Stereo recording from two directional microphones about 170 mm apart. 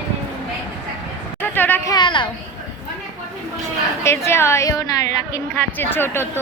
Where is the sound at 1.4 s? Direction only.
10° left (ahead or behind).